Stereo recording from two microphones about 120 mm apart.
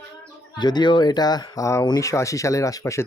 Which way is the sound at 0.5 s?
35° left (ahead or behind).